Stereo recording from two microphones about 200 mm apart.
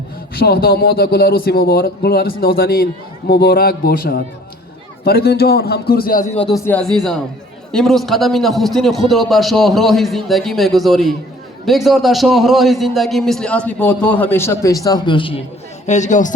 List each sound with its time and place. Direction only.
0.3 s speech: 50° left (ahead or behind)
6.4 s a man's voice: 5° left (ahead or behind); by 15.4 s 25° left (ahead or behind)
15.9 s a man's voice: 35° left (ahead or behind)